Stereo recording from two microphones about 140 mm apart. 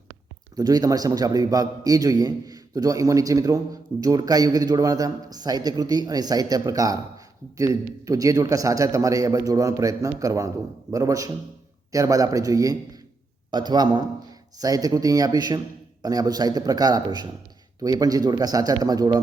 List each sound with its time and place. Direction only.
0.5 s a man's voice: 25° right (ahead or behind)